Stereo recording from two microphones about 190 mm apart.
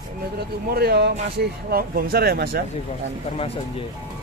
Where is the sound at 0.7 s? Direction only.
55° right (ahead or behind).